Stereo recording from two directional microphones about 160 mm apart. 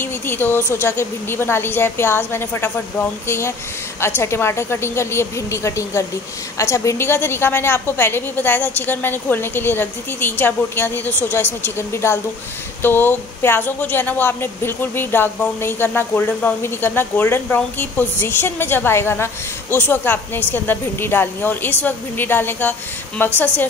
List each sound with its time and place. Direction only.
0.0 s speech: 15° left (ahead or behind)